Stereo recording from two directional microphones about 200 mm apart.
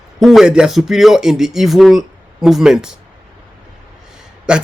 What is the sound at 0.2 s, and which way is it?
A man's voice, centre (ahead or behind).